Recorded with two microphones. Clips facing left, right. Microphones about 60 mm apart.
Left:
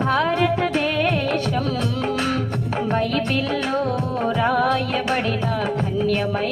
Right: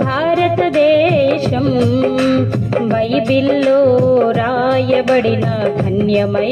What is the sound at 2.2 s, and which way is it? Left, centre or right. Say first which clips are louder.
Music: right 9 dB; right.